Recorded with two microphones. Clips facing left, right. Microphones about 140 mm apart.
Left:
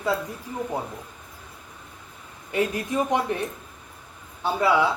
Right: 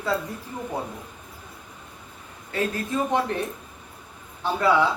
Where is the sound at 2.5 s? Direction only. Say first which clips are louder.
Left 2 dB; 15° left (ahead or behind).